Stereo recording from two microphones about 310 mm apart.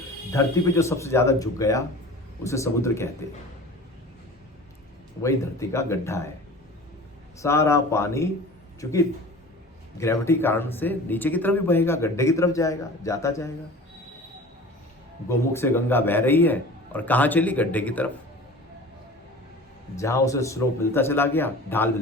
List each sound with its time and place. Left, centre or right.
0.3 s a man's voice: centre
5.2 s a man's voice: centre
7.4 s a man's voice: centre
15.3 s a man's voice: centre
20.0 s a man's voice: centre